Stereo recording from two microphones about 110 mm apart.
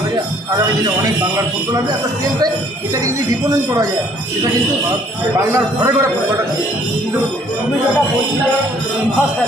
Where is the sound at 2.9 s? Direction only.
30° right (ahead or behind).